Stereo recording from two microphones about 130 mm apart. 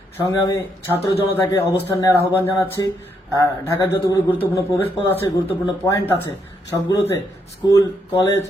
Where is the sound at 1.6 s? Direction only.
20° left (ahead or behind).